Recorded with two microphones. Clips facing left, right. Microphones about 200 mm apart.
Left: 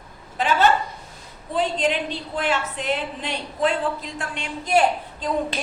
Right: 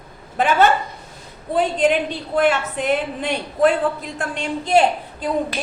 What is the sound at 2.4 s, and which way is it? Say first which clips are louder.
A woman's voice: right 7 dB; 55° right (ahead or behind).